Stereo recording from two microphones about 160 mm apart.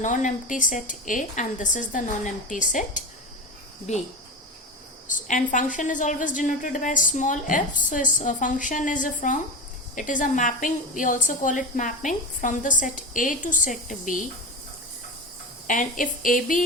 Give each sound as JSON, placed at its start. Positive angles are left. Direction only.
{"t": 0.0, "sound": "a woman's voice", "side_deg": 50}
{"t": 5.0, "sound": "a woman's voice", "side_deg": 55}
{"t": 15.6, "sound": "speech", "side_deg": 55}